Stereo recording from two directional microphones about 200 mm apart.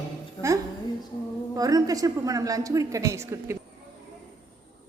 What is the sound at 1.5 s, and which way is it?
A woman's voice, 15° right (ahead or behind).